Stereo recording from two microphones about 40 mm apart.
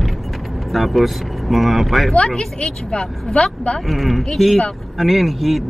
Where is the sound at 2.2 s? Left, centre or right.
Centre.